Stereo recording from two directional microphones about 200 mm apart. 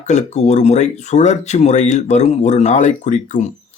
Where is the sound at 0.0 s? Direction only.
35° left (ahead or behind).